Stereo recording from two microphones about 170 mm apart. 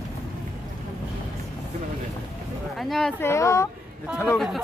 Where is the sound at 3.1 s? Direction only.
15° left (ahead or behind).